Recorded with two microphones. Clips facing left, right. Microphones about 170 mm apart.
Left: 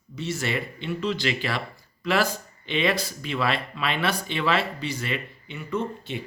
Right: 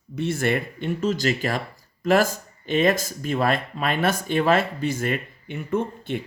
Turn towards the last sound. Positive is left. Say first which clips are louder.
# right 4 dB
turn(degrees=-50)  # may be behind; listen again after turning